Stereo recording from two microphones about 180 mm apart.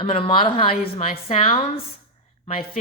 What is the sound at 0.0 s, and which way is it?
A woman's voice, 30° left (ahead or behind).